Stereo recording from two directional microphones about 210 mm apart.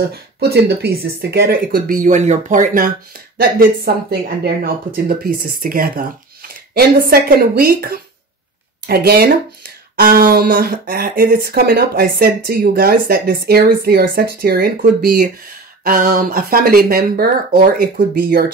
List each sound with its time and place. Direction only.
0.1 s speech: 50° right (ahead or behind)